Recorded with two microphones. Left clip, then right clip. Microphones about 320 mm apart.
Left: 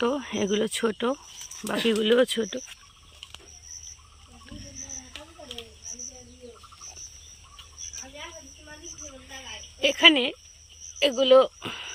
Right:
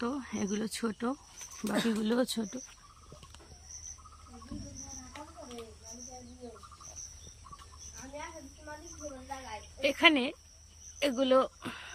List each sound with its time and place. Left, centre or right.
0.0 s speech: centre
9.8 s speech: centre